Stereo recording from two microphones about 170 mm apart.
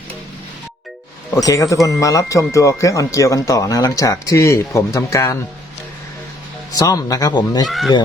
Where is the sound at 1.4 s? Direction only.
20° left (ahead or behind).